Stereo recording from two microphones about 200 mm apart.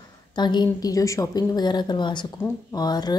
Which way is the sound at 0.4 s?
20° left (ahead or behind).